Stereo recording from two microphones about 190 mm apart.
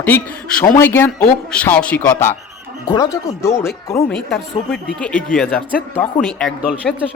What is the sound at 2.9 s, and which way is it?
Speech, 20° left (ahead or behind).